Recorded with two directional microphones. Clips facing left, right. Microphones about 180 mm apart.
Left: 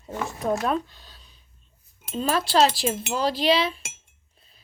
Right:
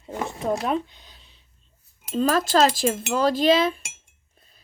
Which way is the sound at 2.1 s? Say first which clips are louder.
Right 2 dB; 40° right (ahead or behind).